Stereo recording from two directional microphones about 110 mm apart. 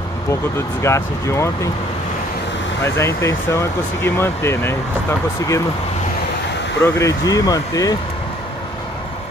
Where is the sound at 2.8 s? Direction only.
25° left (ahead or behind).